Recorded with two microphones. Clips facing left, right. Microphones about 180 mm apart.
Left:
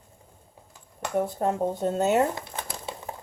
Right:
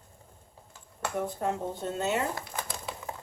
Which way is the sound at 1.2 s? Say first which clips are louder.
Left 4 dB; 35° left (ahead or behind).